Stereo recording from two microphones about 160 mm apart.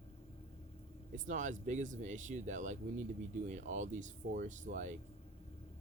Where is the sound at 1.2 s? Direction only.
50° right (ahead or behind).